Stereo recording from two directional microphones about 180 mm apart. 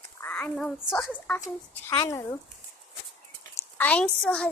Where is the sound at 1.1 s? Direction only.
10° left (ahead or behind).